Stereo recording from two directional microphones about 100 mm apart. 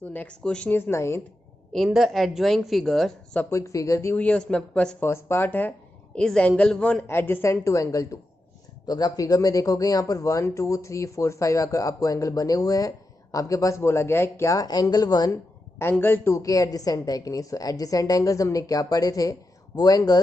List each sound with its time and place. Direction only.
0.0 s speech: 15° left (ahead or behind)
0.7 s a man's voice: 20° left (ahead or behind)
1.7 s a woman's voice: centre (ahead or behind)
3.4 s speech: 30° left (ahead or behind)
4.1 s speech: 15° left (ahead or behind)
5.0 s speech: 25° left (ahead or behind)
7.1 s speech: 25° left (ahead or behind); by 15.3 s 40° left (ahead or behind)
15.8 s a man's voice: 20° left (ahead or behind)
16.4 s speech: 35° left (ahead or behind)